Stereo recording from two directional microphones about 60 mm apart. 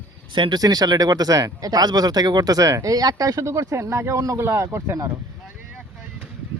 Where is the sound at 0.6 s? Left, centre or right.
Right.